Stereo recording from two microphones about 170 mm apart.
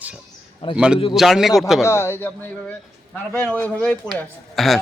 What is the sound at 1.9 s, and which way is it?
A man's voice, 15° left (ahead or behind).